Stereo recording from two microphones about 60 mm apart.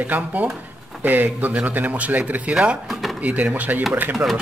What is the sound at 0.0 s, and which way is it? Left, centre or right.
Speech, right.